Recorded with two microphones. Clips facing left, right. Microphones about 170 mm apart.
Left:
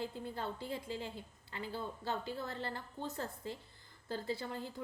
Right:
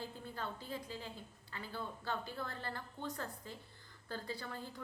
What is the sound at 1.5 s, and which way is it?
A woman's voice, 20° left (ahead or behind).